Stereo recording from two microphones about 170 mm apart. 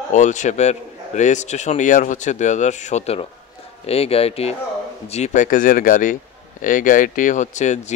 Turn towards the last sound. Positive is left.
turn(degrees=45)  # may be behind; listen again after turning